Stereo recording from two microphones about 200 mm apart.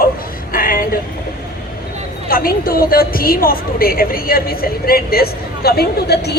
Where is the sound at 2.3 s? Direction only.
45° left (ahead or behind).